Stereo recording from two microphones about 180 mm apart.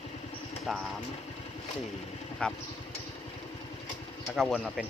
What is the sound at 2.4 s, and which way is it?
Speech, 5° left (ahead or behind).